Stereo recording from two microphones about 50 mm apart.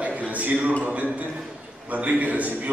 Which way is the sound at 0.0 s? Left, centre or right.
Right.